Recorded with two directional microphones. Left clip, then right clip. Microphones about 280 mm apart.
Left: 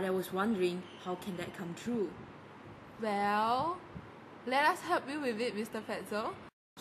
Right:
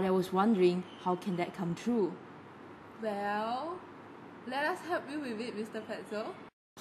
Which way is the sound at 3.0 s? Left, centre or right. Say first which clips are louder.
Left 3 dB; left.